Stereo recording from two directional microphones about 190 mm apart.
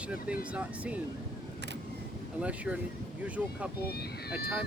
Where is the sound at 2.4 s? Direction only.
5° right (ahead or behind).